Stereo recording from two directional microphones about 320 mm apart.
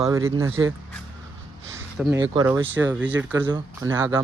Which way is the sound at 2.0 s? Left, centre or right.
Centre.